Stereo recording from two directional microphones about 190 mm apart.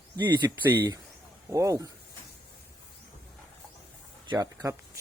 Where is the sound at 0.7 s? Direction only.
25° right (ahead or behind).